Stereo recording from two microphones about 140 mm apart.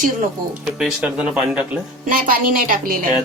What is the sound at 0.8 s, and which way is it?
Speech, 5° right (ahead or behind).